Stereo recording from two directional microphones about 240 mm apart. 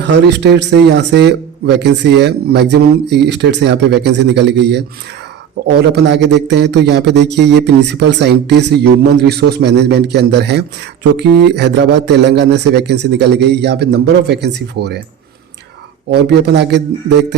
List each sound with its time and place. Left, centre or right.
0.0 s a man's voice: right
5.8 s a man's voice: right
16.1 s a man's voice: right